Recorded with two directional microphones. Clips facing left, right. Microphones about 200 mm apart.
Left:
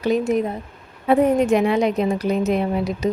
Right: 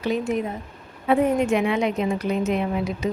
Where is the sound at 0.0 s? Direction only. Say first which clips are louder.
Left 5 dB; 40° left (ahead or behind).